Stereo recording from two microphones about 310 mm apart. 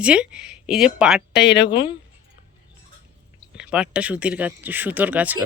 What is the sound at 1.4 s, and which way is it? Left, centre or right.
Speech, left.